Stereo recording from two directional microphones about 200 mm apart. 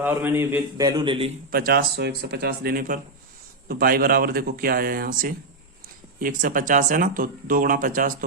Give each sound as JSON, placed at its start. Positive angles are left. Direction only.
{"t": 0.0, "sound": "a man's voice", "side_deg": -10}
{"t": 1.5, "sound": "speech", "side_deg": -50}